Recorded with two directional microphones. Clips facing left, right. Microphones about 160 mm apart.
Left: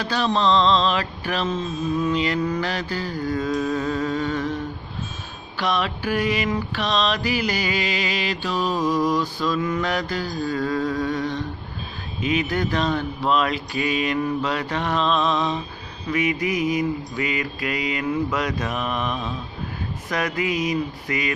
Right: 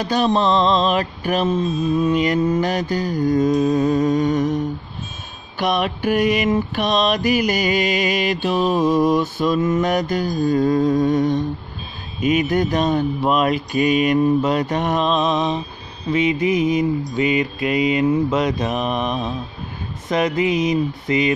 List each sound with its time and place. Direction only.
0.0 s mantra: 15° right (ahead or behind)
1.2 s humming: 20° right (ahead or behind)
2.2 s mantra: 20° right (ahead or behind)
3.6 s humming: 20° right (ahead or behind)
5.6 s mantra: 20° right (ahead or behind)
12.4 s mantra: 20° right (ahead or behind)